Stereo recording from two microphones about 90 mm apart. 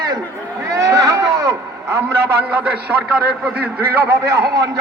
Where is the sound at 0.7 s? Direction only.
40° right (ahead or behind).